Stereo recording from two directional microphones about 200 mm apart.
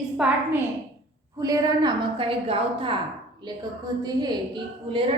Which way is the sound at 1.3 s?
20° right (ahead or behind).